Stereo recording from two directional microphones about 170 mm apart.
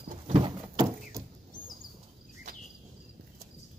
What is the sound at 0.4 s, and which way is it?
Door, 20° right (ahead or behind).